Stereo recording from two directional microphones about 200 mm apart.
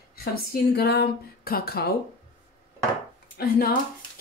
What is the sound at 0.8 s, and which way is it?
Speech, 55° left (ahead or behind).